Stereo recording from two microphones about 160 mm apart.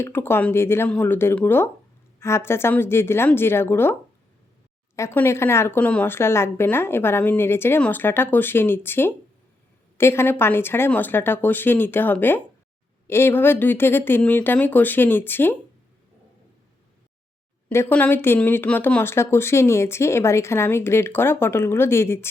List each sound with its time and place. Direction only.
0.0 s speech: 15° left (ahead or behind)
4.9 s speech: 15° left (ahead or behind)
17.7 s speech: 15° left (ahead or behind)